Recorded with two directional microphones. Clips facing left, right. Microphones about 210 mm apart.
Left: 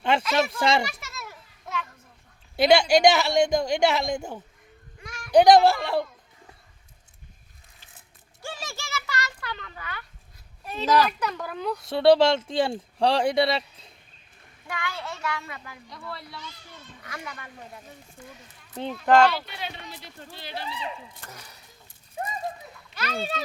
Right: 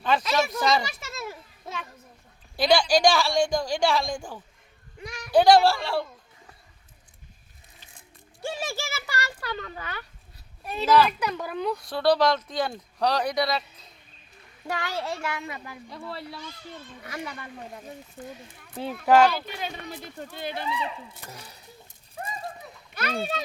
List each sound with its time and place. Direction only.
0.0 s a woman's voice: 30° left (ahead or behind)
0.9 s children playing: 25° right (ahead or behind)
2.6 s a woman's voice: 25° left (ahead or behind)
5.0 s a sound: 20° right (ahead or behind)
5.3 s a woman's voice: 20° left (ahead or behind)
8.4 s a sound: 25° right (ahead or behind)
10.7 s speech: 10° right (ahead or behind)
11.5 s speech: centre (ahead or behind)
11.8 s a woman's voice: 25° left (ahead or behind)
14.7 s a child's voice: 40° right (ahead or behind)
18.7 s speech: 5° right (ahead or behind)
19.5 s speech: 45° right (ahead or behind)